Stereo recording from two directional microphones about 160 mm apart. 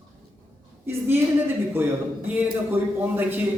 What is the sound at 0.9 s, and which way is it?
A man's voice, 15° right (ahead or behind).